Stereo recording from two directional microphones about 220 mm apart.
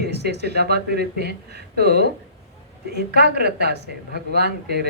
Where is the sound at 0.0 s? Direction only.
50° right (ahead or behind).